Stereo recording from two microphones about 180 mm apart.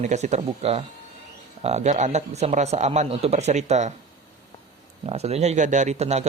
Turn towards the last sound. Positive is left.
turn(degrees=-35)  # may be behind; listen again after turning